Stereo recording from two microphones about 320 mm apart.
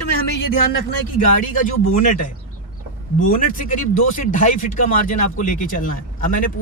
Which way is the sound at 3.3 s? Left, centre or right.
Left.